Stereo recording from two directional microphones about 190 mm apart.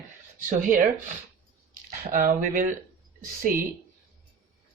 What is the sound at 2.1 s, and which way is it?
Speech, 45° right (ahead or behind).